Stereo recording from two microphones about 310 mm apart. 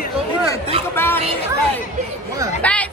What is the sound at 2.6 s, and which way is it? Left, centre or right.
Speech, centre.